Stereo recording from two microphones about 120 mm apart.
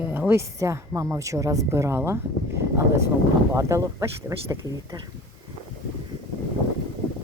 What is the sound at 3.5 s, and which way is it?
Speech, 25° right (ahead or behind).